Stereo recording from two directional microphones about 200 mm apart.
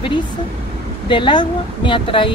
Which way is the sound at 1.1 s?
25° left (ahead or behind).